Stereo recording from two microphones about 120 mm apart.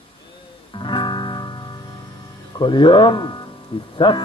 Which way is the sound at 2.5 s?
40° left (ahead or behind).